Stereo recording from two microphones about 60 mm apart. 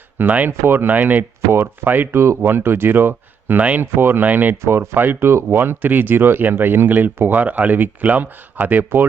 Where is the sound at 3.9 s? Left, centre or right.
Right.